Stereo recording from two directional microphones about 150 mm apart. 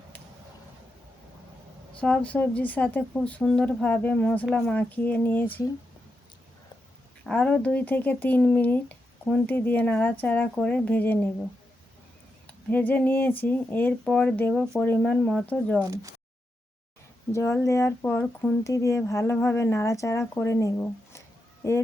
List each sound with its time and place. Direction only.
2.0 s speech: 10° left (ahead or behind)
7.3 s speech: 5° left (ahead or behind)
12.7 s speech: 10° left (ahead or behind)
15.8 s speech: 20° right (ahead or behind)
17.3 s speech: 20° left (ahead or behind)